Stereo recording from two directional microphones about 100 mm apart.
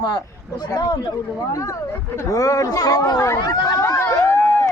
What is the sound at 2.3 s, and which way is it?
Speech, 35° left (ahead or behind).